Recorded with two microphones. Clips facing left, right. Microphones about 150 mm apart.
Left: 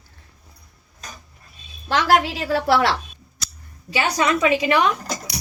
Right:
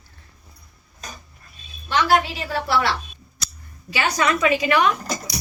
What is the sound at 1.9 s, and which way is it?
A woman's voice, 90° left.